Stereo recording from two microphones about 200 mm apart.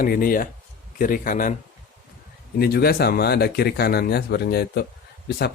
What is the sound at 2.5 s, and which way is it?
Speech, 50° left (ahead or behind).